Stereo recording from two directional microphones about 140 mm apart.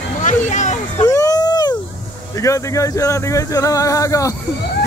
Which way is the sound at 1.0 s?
25° left (ahead or behind).